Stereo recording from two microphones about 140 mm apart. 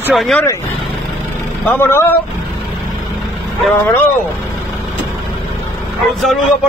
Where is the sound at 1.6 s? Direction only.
15° left (ahead or behind).